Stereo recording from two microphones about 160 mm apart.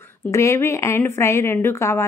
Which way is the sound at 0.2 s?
15° left (ahead or behind).